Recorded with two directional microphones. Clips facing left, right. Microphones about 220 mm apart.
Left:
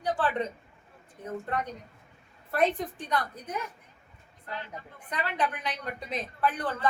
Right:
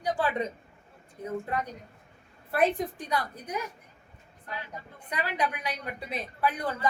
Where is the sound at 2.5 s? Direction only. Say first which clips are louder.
Right 1 dB; 10° right (ahead or behind).